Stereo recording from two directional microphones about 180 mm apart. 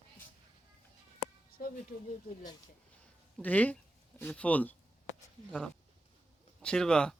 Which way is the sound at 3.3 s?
10° left (ahead or behind).